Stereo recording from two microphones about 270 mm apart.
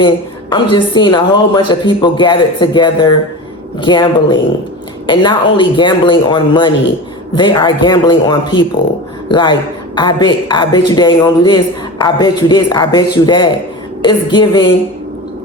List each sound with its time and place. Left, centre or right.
0.5 s a woman's voice: centre